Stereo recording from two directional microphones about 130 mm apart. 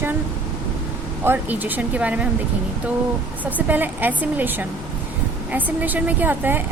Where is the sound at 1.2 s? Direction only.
15° right (ahead or behind).